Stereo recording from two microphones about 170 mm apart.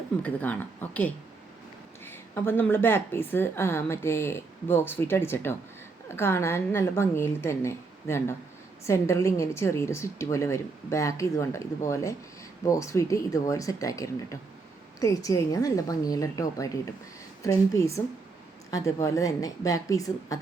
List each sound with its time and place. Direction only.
0.2 s a woman's voice: 10° left (ahead or behind)